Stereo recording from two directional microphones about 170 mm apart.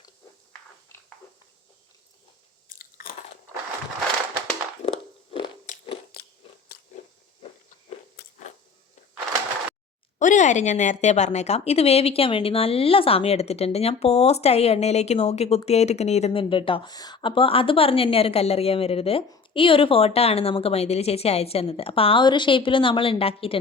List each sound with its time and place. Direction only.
2.7 s chewing: 55° left (ahead or behind)
4.9 s a sound: 30° left (ahead or behind)
5.7 s a sound: 45° left (ahead or behind)
6.1 s biting: 65° left (ahead or behind)
8.2 s biting: 70° left (ahead or behind)
10.2 s a woman's voice: 45° left (ahead or behind)